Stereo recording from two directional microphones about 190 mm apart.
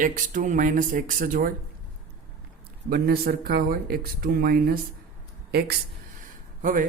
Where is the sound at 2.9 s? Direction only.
55° right (ahead or behind).